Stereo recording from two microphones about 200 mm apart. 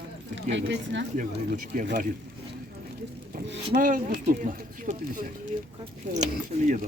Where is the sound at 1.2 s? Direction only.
40° right (ahead or behind).